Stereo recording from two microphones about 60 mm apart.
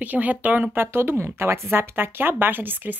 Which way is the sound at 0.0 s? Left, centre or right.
Right.